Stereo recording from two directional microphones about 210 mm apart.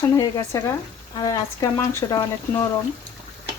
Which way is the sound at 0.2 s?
15° left (ahead or behind).